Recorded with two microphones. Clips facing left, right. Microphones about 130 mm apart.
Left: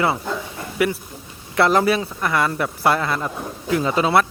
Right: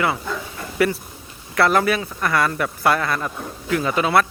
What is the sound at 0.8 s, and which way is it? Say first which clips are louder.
Speech: right 1 dB; 15° left (ahead or behind).